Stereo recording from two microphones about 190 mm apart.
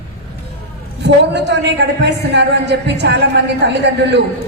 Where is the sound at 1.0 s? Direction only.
65° right (ahead or behind).